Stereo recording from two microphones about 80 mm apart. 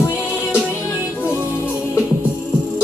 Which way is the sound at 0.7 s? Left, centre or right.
Left.